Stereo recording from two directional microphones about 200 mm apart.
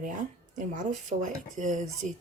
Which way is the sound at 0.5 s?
40° right (ahead or behind).